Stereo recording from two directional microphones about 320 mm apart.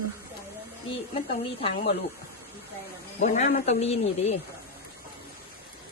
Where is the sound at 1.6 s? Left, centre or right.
Centre.